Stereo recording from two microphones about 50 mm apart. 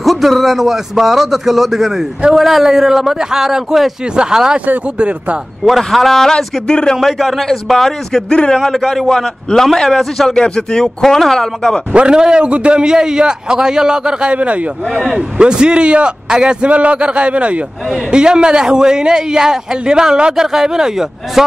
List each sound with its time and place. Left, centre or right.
0.0 s a man's voice: centre; by 5.4 s right
5.7 s speech: centre
6.7 s a man's voice: centre
7.0 s speech: centre
8.3 s speech: centre
8.6 s speech: centre
11.9 s a man's voice: centre